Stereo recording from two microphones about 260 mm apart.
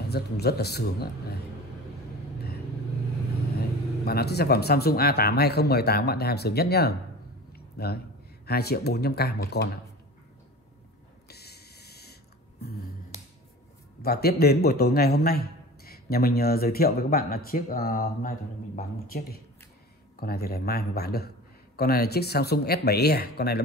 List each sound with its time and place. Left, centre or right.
0.1 s a man's voice: left
4.0 s a man's voice: left
7.5 s a sound: left
8.5 s a man's voice: left
11.2 s snort: left
12.6 s finger snapping: left
14.0 s a man's voice: left